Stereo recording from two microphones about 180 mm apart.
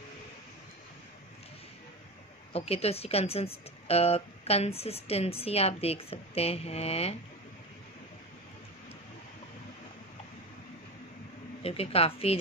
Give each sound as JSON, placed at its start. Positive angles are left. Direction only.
{"t": 2.5, "sound": "a woman's voice", "side_deg": 35}
{"t": 11.6, "sound": "a woman's voice", "side_deg": 35}